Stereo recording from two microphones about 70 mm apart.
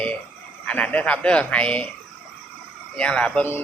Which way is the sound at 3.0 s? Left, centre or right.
Centre.